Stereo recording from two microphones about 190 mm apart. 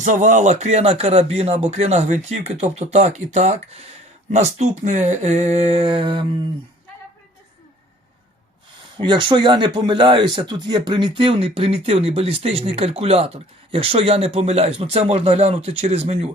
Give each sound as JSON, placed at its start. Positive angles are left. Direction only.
{"t": 0.0, "sound": "speech", "side_deg": -40}
{"t": 9.0, "sound": "speech", "side_deg": -25}